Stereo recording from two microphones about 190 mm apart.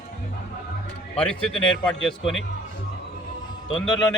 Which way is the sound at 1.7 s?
90° left.